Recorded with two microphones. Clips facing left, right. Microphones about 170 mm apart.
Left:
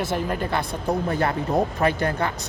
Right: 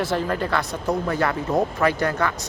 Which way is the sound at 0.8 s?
30° left (ahead or behind).